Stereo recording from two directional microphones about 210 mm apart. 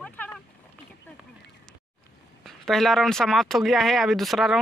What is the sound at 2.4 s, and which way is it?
Speech, centre (ahead or behind).